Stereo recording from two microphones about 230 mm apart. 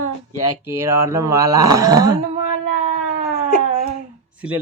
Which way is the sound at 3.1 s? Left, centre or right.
Right.